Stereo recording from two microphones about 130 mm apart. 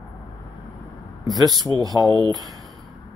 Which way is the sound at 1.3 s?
30° right (ahead or behind).